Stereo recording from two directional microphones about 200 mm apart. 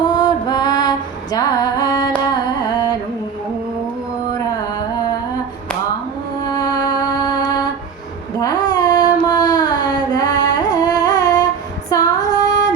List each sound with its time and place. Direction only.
0.0 s female singing: 20° left (ahead or behind)
2.3 s carnatic music: 20° left (ahead or behind)
6.4 s music: 20° left (ahead or behind)
8.4 s child singing: 20° left (ahead or behind)
11.9 s female singing: 20° left (ahead or behind)